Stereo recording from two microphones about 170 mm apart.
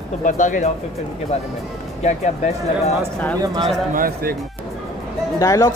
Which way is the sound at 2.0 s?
45° left (ahead or behind).